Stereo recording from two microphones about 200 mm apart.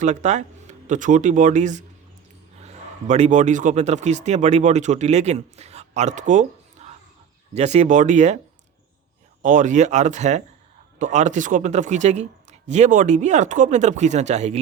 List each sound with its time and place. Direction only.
0.0 s a man's voice: 35° right (ahead or behind)
9.4 s speech: 40° right (ahead or behind)